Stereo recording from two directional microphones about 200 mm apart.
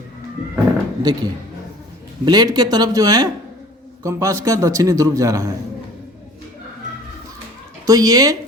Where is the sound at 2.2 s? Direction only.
20° right (ahead or behind).